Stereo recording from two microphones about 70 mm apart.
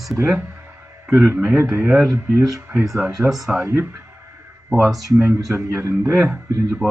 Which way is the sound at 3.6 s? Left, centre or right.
Right.